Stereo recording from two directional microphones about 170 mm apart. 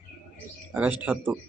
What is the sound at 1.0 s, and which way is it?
Speech, 10° right (ahead or behind).